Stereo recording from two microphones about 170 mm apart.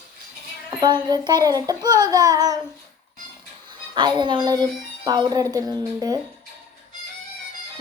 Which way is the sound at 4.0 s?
25° right (ahead or behind).